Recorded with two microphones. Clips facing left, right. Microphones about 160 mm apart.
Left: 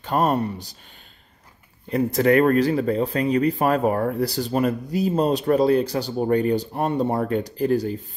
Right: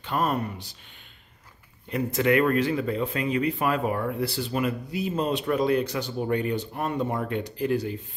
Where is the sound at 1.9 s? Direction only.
35° left (ahead or behind).